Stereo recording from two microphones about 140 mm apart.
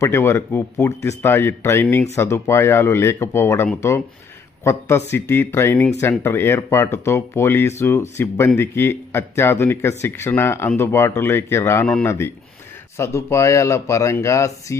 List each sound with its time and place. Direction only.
0.0 s speech: 20° left (ahead or behind)